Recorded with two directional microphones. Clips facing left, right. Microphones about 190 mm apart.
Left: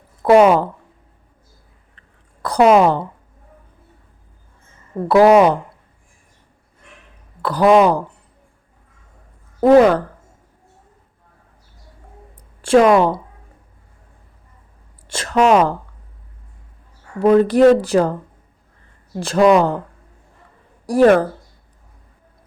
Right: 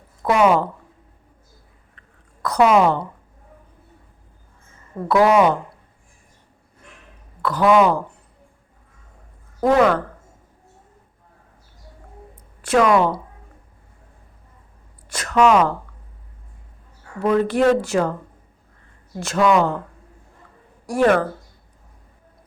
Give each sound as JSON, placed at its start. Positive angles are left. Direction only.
{"t": 0.2, "sound": "speech", "side_deg": 35}
{"t": 2.0, "sound": "hiccup", "side_deg": 30}
{"t": 5.0, "sound": "speech", "side_deg": 35}
{"t": 7.4, "sound": "speech", "side_deg": 35}
{"t": 9.6, "sound": "a woman's voice", "side_deg": 30}
{"t": 12.6, "sound": "a woman's voice", "side_deg": 30}
{"t": 15.1, "sound": "a woman's voice", "side_deg": 30}
{"t": 17.2, "sound": "speech", "side_deg": 35}
{"t": 19.2, "sound": "speech", "side_deg": 35}
{"t": 20.8, "sound": "speech", "side_deg": 35}